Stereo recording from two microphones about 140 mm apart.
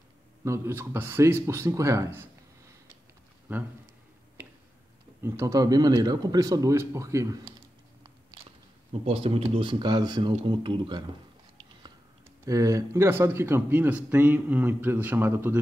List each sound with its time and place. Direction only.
0.4 s a man's voice: 20° right (ahead or behind)
3.5 s a man's voice: 15° right (ahead or behind)
5.2 s a man's voice: 20° right (ahead or behind)
9.0 s speech: 45° right (ahead or behind)
12.4 s a man's voice: 25° right (ahead or behind)